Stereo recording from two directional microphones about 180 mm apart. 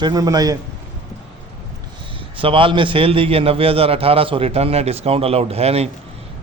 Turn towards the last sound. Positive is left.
turn(degrees=-35)  # may be behind; listen again after turning